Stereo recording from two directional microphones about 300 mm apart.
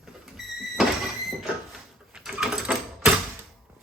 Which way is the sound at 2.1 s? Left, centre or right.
Centre.